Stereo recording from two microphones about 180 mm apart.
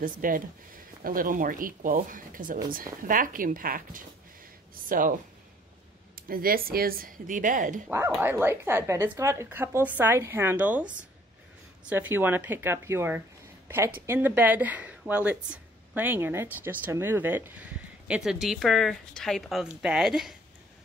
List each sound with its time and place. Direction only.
0.0 s speech: 50° right (ahead or behind)
6.1 s speech: 55° right (ahead or behind)
8.1 s speech: 10° right (ahead or behind)